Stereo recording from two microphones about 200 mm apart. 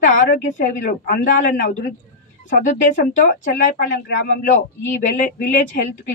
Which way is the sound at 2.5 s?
40° left (ahead or behind).